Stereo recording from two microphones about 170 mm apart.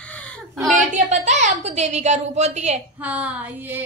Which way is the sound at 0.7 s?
45° right (ahead or behind).